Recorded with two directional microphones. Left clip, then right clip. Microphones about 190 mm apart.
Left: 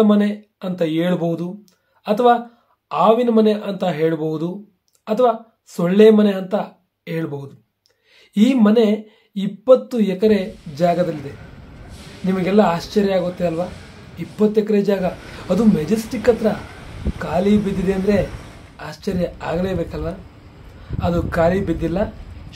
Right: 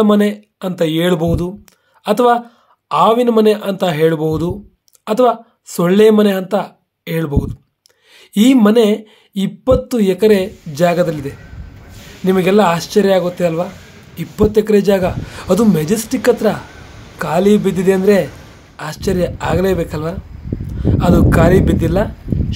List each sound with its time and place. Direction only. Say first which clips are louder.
0.0 s speech: right 4 dB; 40° right (ahead or behind)
12.3 s speech: right 5 dB; 40° right (ahead or behind)